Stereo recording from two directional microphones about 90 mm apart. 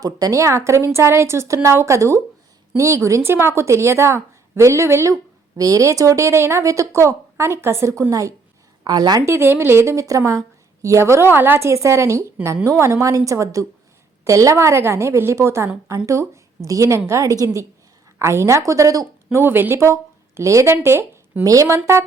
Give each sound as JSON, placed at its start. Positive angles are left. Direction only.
{"t": 0.0, "sound": "a woman's voice", "side_deg": -40}
{"t": 8.8, "sound": "a woman's voice", "side_deg": -50}
{"t": 9.2, "sound": "a woman's voice", "side_deg": -30}
{"t": 19.4, "sound": "speech", "side_deg": -25}
{"t": 21.4, "sound": "a woman's voice", "side_deg": -40}